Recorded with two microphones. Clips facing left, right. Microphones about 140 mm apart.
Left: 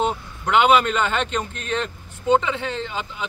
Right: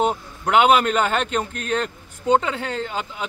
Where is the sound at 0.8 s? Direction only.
40° right (ahead or behind).